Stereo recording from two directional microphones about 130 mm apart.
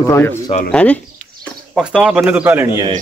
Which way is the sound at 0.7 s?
10° left (ahead or behind).